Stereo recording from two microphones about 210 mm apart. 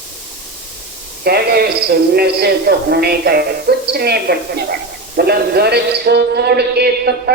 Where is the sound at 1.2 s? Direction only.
50° right (ahead or behind).